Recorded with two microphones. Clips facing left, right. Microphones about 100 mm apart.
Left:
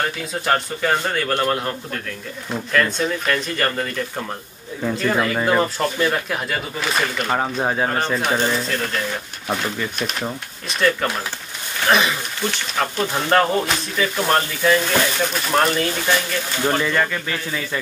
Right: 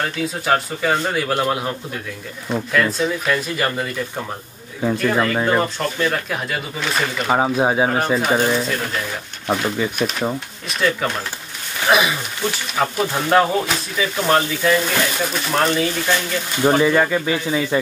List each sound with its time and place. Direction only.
0.0 s speech: centre (ahead or behind)
5.0 s speech: centre (ahead or behind)
7.2 s speech: 15° right (ahead or behind)
16.6 s speech: 15° right (ahead or behind)